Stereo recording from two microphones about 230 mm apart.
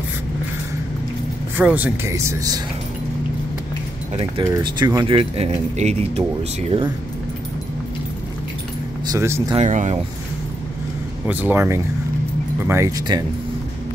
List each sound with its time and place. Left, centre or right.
1.6 s speech: centre
4.4 s speech: centre
9.1 s speech: centre
9.6 s speech: right
11.2 s speech: centre